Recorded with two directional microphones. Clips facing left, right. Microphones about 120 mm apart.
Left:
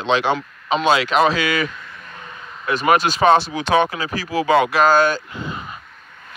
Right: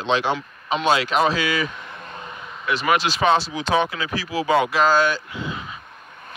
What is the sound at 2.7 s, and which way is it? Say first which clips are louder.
Speech: left 4 dB; 45° left (ahead or behind).